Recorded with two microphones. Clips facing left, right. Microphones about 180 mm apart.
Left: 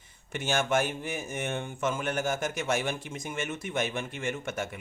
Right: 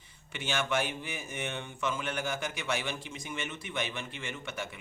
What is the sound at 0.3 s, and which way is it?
Speech, 45° left (ahead or behind).